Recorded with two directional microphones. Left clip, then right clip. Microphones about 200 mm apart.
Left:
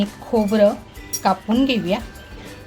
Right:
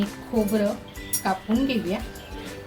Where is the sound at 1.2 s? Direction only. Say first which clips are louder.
Left 6 dB; 50° left (ahead or behind).